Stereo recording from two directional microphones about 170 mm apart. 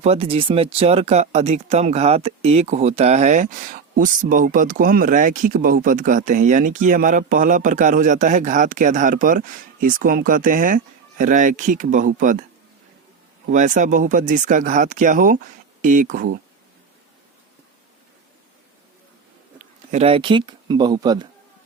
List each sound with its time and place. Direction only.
0.0 s speech: 35° right (ahead or behind)
13.5 s speech: 50° right (ahead or behind)
19.9 s speech: 35° right (ahead or behind)